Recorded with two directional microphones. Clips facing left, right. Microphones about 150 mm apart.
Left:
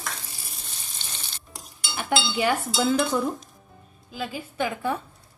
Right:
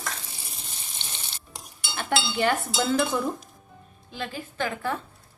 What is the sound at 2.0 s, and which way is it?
Speech, 10° left (ahead or behind).